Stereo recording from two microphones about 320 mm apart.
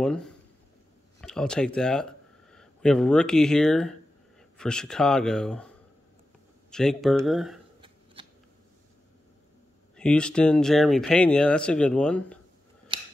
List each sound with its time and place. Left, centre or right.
0.0 s speech: centre
6.7 s speech: centre
7.8 s shuffling cards: centre
9.9 s speech: centre
12.9 s scissors: centre